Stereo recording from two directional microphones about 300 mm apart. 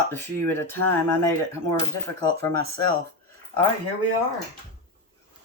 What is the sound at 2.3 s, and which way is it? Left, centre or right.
Speech, right.